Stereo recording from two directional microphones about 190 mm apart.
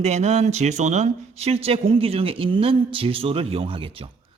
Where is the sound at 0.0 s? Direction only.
35° right (ahead or behind).